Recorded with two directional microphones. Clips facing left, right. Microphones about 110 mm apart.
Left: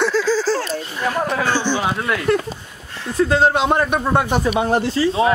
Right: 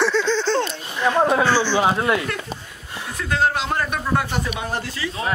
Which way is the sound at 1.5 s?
15° left (ahead or behind).